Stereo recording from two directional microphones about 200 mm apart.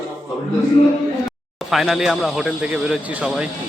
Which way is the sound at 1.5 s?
Centre (ahead or behind).